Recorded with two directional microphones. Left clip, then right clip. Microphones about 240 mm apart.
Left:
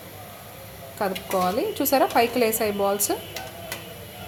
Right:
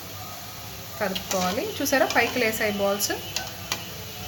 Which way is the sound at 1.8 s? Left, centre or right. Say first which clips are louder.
Left 1 dB; left.